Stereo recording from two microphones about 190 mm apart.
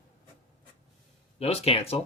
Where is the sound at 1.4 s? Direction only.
30° left (ahead or behind).